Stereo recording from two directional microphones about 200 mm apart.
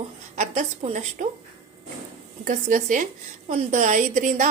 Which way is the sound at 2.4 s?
40° right (ahead or behind).